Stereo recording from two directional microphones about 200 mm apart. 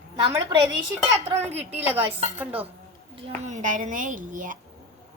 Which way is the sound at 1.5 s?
10° right (ahead or behind).